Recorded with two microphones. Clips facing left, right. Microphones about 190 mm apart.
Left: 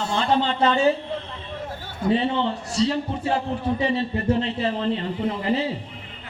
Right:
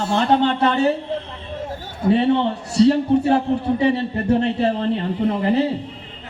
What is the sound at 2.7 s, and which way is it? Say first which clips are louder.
Speech: right 11 dB; 65° right (ahead or behind).